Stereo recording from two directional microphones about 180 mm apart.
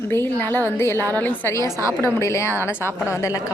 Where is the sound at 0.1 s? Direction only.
10° left (ahead or behind).